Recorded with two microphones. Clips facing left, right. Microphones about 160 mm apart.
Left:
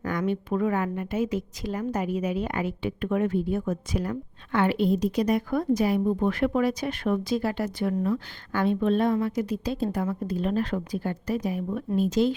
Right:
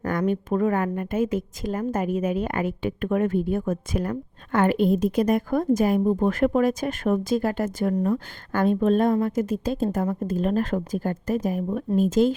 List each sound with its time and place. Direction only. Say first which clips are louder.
0.0 s a woman's voice: right 3 dB; 45° right (ahead or behind)